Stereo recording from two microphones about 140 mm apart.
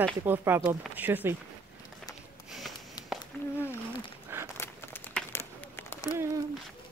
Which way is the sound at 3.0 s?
30° left (ahead or behind).